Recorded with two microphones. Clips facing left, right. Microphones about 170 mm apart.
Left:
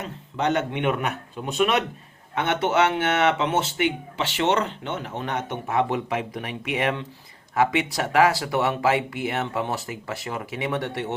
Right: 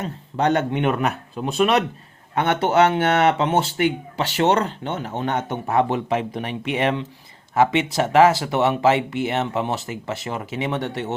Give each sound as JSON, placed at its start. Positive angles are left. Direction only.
{"t": 0.0, "sound": "speech", "side_deg": -35}